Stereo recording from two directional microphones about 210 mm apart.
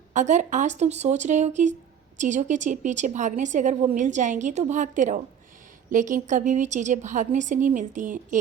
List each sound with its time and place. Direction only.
0.1 s a woman's voice: 35° right (ahead or behind)